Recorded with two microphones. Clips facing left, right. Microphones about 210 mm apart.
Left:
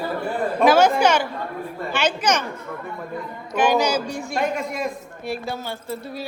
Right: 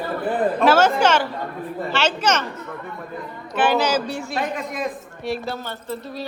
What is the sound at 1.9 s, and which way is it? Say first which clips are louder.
Speech: even; 15° left (ahead or behind).